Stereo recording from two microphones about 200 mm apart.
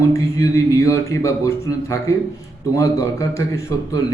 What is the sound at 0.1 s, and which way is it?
A man's voice, 15° left (ahead or behind).